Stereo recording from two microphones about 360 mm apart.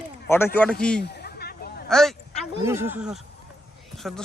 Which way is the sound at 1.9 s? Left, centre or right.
Centre.